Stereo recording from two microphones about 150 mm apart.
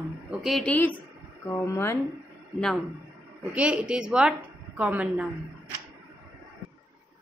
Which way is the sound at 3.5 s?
10° right (ahead or behind).